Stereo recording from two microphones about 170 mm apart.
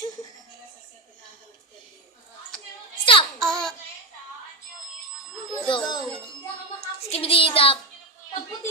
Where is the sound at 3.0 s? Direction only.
30° left (ahead or behind).